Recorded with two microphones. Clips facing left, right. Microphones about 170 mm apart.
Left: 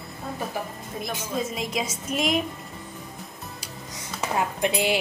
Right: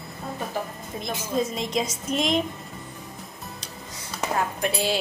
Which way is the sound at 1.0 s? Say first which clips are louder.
Right 3 dB; 5° left (ahead or behind).